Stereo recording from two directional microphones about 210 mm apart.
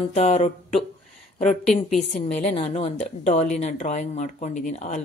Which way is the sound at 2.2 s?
30° left (ahead or behind).